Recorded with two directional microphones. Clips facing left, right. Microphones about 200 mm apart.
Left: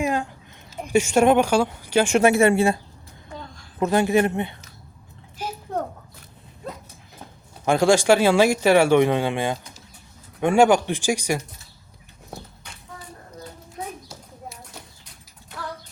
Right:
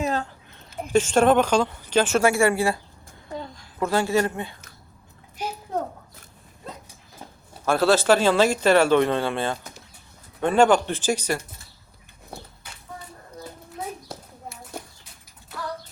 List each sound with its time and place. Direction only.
0.0 s a sound: 15° left (ahead or behind)
0.9 s speech: 10° left (ahead or behind)
3.8 s a woman's voice: 20° left (ahead or behind)
7.6 s speech: 15° left (ahead or behind)
14.1 s clip-clop: 55° right (ahead or behind)